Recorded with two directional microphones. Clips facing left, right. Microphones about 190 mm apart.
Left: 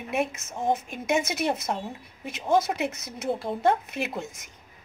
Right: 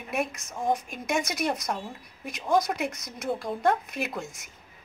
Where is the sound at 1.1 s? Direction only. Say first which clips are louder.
Left 2 dB; 5° left (ahead or behind).